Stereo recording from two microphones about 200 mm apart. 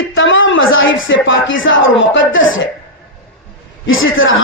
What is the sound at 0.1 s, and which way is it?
Speech, 70° left (ahead or behind).